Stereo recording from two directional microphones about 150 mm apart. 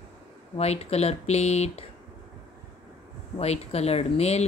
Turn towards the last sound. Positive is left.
turn(degrees=45)  # may be behind; listen again after turning